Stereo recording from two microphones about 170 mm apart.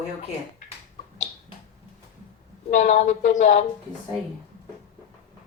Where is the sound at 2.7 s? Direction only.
45° left (ahead or behind).